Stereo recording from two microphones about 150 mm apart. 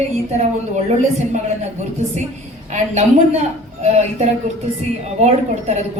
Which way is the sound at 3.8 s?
50° right (ahead or behind).